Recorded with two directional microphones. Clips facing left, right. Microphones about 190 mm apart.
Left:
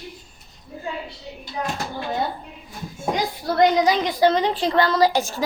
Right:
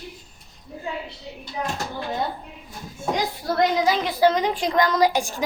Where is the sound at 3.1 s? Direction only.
Centre (ahead or behind).